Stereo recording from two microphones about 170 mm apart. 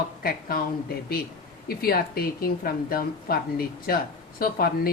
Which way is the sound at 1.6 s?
65° left (ahead or behind).